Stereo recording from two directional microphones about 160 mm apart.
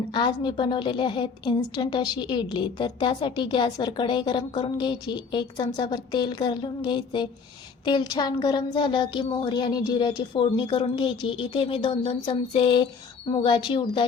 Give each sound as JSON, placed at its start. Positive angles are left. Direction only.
{"t": 0.1, "sound": "a woman's voice", "side_deg": 30}